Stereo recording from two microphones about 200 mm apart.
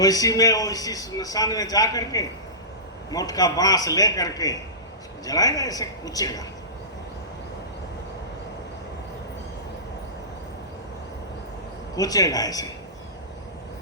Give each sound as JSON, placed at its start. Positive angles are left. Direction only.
{"t": 0.0, "sound": "a man's voice", "side_deg": 20}
{"t": 11.9, "sound": "a man's voice", "side_deg": 20}